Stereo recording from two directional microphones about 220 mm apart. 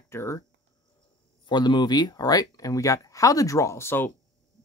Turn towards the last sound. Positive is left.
turn(degrees=10)  # may be behind; listen again after turning